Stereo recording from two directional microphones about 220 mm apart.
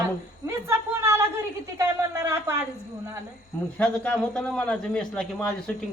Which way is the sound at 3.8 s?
5° left (ahead or behind).